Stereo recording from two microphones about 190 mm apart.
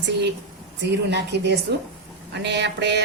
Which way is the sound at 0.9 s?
65° right (ahead or behind).